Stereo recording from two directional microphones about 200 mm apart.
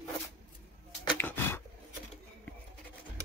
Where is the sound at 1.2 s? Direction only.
10° left (ahead or behind).